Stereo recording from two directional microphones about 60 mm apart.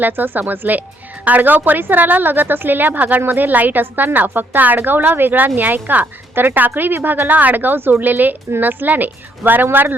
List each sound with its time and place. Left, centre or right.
0.0 s a woman's voice: right